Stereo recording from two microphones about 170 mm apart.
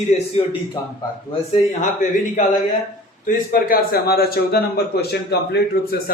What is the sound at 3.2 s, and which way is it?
A man's voice, 55° left (ahead or behind).